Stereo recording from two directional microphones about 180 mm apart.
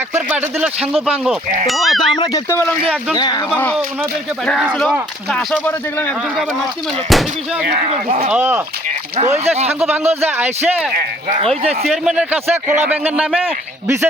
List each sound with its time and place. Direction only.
0.1 s speech: 10° right (ahead or behind)
2.1 s speech: 15° left (ahead or behind)
3.2 s speech: 25° left (ahead or behind)
3.5 s speech: 10° left (ahead or behind)
7.1 s speech: centre (ahead or behind)
7.7 s speech: 40° right (ahead or behind)
8.3 s speech: 10° right (ahead or behind)
9.1 s speech: 40° right (ahead or behind)
9.8 s speech: 10° right (ahead or behind)
11.9 s speech: 5° right (ahead or behind)